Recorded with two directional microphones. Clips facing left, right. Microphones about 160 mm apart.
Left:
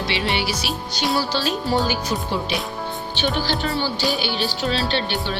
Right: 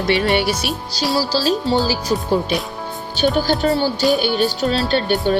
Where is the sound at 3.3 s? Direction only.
45° right (ahead or behind).